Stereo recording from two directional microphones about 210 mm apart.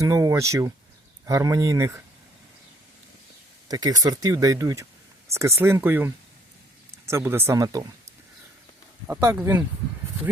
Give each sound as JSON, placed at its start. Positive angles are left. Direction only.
{"t": 0.0, "sound": "speech", "side_deg": -15}
{"t": 3.7, "sound": "speech", "side_deg": -15}
{"t": 9.0, "sound": "speech", "side_deg": -10}